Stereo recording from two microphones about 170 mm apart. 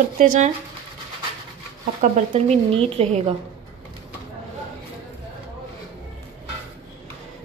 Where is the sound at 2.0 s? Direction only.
45° right (ahead or behind).